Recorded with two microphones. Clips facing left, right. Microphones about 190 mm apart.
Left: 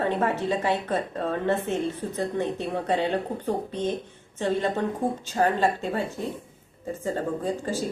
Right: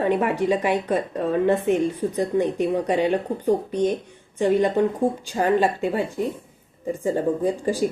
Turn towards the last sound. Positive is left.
turn(degrees=-15)  # may be behind; listen again after turning